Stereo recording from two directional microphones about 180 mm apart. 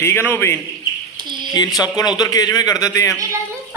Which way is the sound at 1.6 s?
20° left (ahead or behind).